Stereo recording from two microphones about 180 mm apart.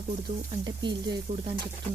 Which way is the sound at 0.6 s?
25° right (ahead or behind).